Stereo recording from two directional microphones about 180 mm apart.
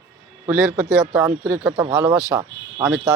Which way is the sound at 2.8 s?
5° right (ahead or behind).